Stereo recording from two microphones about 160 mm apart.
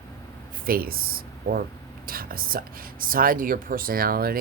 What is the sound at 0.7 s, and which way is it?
Speech, 70° right (ahead or behind).